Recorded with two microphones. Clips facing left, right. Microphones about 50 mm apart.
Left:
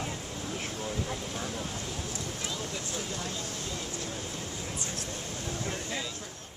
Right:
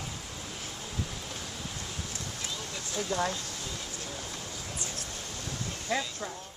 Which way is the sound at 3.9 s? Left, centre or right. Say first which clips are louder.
Left 2 dB; left.